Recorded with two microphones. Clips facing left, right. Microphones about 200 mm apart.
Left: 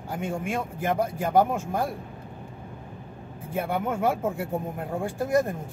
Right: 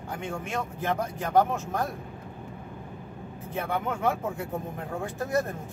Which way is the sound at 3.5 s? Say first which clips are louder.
Left 3 dB; 10° left (ahead or behind).